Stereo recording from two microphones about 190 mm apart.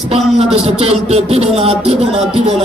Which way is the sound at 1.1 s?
30° right (ahead or behind).